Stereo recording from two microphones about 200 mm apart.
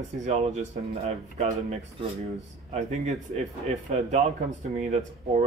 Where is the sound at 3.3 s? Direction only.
35° right (ahead or behind).